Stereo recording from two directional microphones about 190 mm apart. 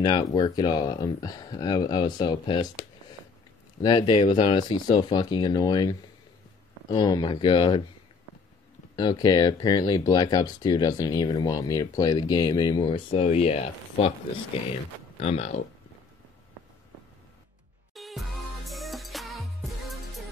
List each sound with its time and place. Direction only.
0.0 s speech: 20° left (ahead or behind)
2.6 s speech: 40° left (ahead or behind)
3.8 s speech: 25° left (ahead or behind)
8.9 s speech: 20° left (ahead or behind)
17.9 s music: centre (ahead or behind)